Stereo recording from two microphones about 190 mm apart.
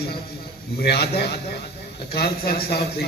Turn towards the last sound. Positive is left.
turn(degrees=55)  # may be behind; listen again after turning